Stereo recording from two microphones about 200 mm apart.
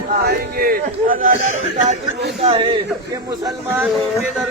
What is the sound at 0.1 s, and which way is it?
A man's voice, 45° right (ahead or behind).